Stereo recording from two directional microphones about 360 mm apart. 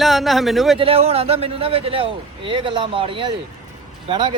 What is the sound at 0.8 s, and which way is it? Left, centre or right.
A man's voice, centre.